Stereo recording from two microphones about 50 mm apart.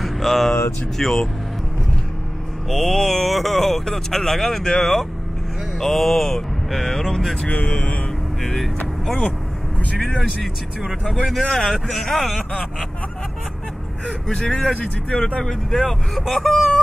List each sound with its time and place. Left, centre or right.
0.0 s vehicle: centre
0.9 s speech: centre
2.7 s speech: centre
7.4 s speech: left
8.4 s speech: centre
11.4 s speech: centre
14.0 s speech: centre
15.4 s speech: centre